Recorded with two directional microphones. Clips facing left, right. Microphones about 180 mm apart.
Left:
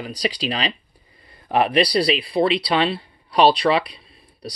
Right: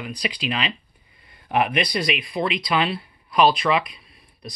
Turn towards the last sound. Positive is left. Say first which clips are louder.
# left 4 dB
turn(degrees=35)  # may be behind; listen again after turning